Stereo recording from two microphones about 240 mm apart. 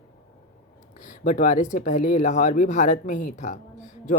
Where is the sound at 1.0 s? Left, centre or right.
Left.